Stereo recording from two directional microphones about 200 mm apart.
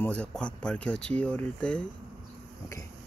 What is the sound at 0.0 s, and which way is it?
Speech, 5° left (ahead or behind).